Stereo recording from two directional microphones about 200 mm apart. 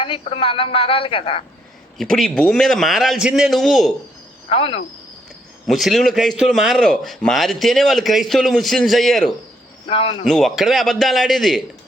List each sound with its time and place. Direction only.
0.0 s a woman's voice: 25° left (ahead or behind)
2.0 s a man's voice: centre (ahead or behind)
4.4 s speech: 30° left (ahead or behind)
5.6 s a man's voice: centre (ahead or behind)
9.8 s speech: 30° left (ahead or behind)
10.2 s a man's voice: centre (ahead or behind)